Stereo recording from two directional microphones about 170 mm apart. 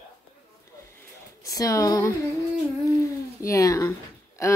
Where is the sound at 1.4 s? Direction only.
20° left (ahead or behind).